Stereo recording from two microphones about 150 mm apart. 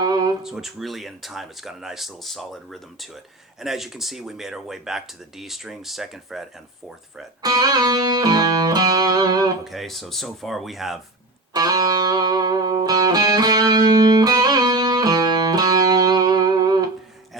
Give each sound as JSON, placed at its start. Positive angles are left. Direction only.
{"t": 0.0, "sound": "a sound", "side_deg": -25}
{"t": 0.4, "sound": "speech", "side_deg": 0}
{"t": 7.4, "sound": "music", "side_deg": -25}
{"t": 9.6, "sound": "speech", "side_deg": 0}
{"t": 11.5, "sound": "music", "side_deg": -25}